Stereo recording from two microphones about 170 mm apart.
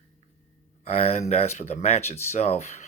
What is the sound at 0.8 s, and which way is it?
Speech, 40° left (ahead or behind).